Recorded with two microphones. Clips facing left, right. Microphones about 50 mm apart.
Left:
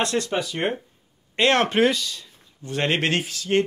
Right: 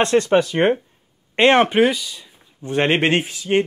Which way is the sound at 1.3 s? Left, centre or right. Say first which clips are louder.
Right 5 dB; right.